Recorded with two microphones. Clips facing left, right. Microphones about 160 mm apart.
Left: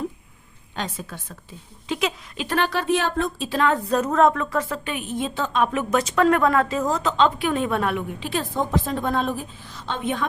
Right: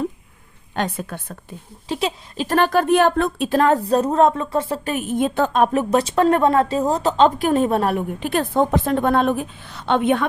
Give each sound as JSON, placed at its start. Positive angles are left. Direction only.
{"t": 0.8, "sound": "a woman's voice", "side_deg": -60}
{"t": 1.9, "sound": "a woman's voice", "side_deg": -35}
{"t": 3.6, "sound": "a woman's voice", "side_deg": -40}
{"t": 4.9, "sound": "a woman's voice", "side_deg": -45}